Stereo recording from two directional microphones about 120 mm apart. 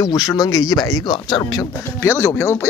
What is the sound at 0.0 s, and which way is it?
Speech, 30° left (ahead or behind).